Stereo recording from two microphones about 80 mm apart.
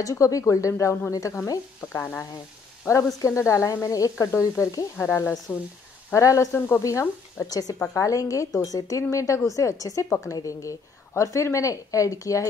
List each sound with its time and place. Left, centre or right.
0.0 s a woman's voice: left
1.1 s sizzle: left
1.9 s frying: left
2.9 s a woman's voice: left
4.9 s sizzle: left
7.4 s a woman's voice: left